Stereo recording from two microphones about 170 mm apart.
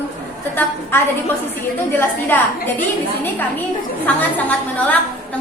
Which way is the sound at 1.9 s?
10° left (ahead or behind).